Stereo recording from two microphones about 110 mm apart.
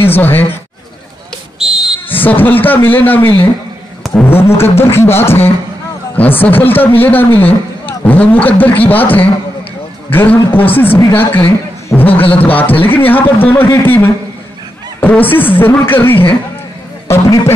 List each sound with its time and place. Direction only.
0.0 s speech: 20° left (ahead or behind)
1.6 s music: 5° right (ahead or behind)
2.0 s a man's voice: 15° left (ahead or behind)
12.1 s a man's voice: 55° left (ahead or behind)
12.8 s a man's voice: 15° left (ahead or behind)